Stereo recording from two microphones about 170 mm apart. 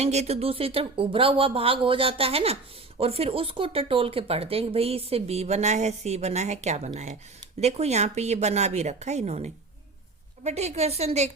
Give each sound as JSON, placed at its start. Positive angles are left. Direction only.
{"t": 0.0, "sound": "speech", "side_deg": -40}